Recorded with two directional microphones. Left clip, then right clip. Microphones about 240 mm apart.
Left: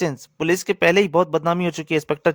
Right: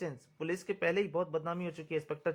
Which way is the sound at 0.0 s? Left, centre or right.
Left.